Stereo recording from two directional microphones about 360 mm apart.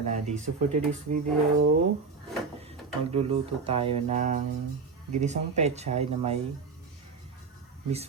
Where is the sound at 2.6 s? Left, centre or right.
Centre.